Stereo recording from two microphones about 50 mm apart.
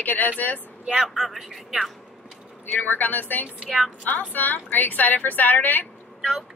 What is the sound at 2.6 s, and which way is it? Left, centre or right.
Speech, left.